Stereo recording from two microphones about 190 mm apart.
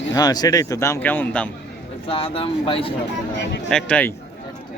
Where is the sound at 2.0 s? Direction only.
30° left (ahead or behind).